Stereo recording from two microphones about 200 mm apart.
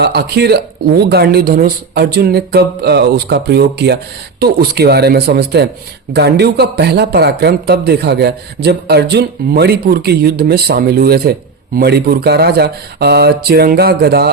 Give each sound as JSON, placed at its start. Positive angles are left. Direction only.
{"t": 0.0, "sound": "a man's voice", "side_deg": -55}